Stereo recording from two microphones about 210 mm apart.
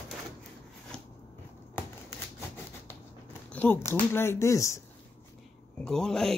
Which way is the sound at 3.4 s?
10° left (ahead or behind).